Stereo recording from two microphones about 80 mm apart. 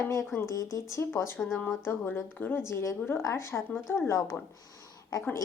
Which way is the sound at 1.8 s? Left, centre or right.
Left.